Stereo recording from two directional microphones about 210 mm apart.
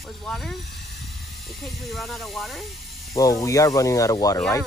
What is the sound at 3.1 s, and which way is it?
Speech, 15° left (ahead or behind).